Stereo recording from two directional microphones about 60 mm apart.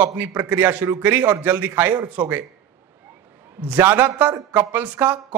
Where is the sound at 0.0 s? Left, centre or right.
Right.